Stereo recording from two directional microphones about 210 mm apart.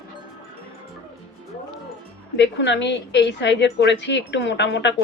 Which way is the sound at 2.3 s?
55° left (ahead or behind).